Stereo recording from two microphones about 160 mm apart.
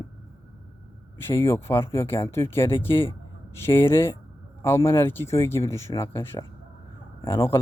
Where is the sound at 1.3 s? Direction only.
15° left (ahead or behind).